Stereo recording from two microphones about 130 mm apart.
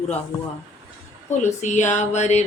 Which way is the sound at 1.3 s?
65° left (ahead or behind).